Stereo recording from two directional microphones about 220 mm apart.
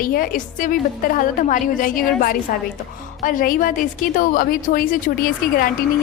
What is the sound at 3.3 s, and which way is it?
A woman's voice, 40° left (ahead or behind).